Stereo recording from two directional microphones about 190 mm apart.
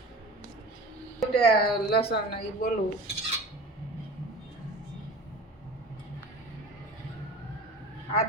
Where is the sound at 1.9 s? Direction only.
55° left (ahead or behind).